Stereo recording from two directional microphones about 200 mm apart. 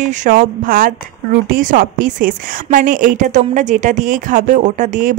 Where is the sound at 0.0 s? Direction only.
40° right (ahead or behind).